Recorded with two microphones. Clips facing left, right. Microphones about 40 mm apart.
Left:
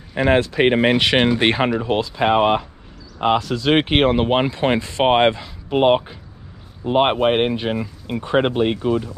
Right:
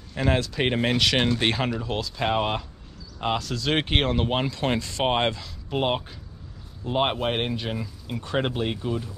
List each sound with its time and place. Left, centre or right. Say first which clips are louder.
0.1 s speech: left 8 dB; left